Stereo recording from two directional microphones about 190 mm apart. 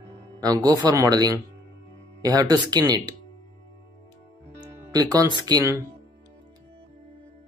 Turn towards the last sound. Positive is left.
turn(degrees=-20)  # may be behind; listen again after turning